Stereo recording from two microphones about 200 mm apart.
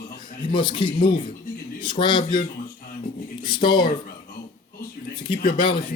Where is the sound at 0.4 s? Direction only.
25° left (ahead or behind).